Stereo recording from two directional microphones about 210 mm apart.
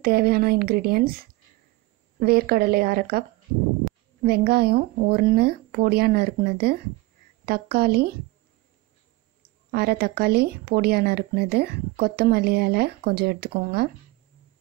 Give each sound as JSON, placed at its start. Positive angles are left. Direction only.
{"t": 0.0, "sound": "speech", "side_deg": -45}
{"t": 9.7, "sound": "speech", "side_deg": -50}